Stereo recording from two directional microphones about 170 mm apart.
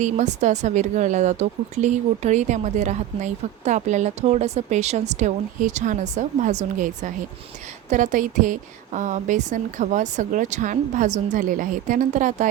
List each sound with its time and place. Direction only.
0.0 s a woman's voice: 45° right (ahead or behind)